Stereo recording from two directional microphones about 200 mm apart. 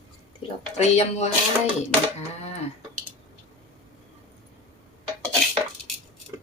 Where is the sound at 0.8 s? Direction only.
35° left (ahead or behind).